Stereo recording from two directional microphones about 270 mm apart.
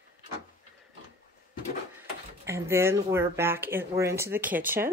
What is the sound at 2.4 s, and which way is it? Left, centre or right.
Speech, centre.